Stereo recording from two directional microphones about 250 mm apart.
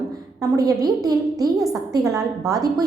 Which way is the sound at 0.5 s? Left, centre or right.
Centre.